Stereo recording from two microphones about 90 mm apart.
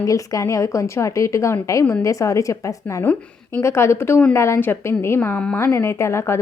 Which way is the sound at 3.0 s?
15° left (ahead or behind).